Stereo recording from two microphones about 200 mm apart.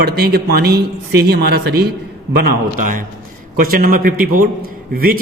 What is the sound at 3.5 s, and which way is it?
A man's voice, 45° right (ahead or behind).